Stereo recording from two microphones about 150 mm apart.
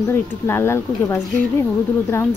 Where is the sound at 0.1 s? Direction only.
15° left (ahead or behind).